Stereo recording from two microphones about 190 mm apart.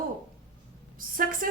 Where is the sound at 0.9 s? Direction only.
45° right (ahead or behind).